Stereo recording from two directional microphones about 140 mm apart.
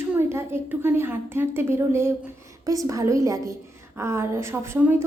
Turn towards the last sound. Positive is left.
turn(degrees=-15)  # may be behind; listen again after turning